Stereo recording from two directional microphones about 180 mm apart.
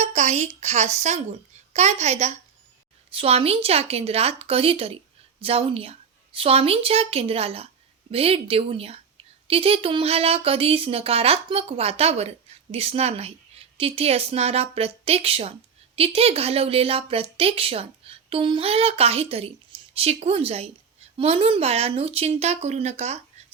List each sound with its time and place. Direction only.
0.0 s a woman's voice: 40° right (ahead or behind)